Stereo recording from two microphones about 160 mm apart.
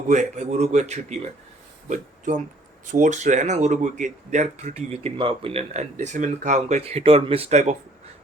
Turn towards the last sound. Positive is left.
turn(degrees=-45)  # may be behind; listen again after turning